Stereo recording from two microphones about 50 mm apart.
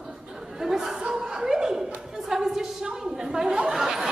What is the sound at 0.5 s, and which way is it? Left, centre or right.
A woman's voice, centre.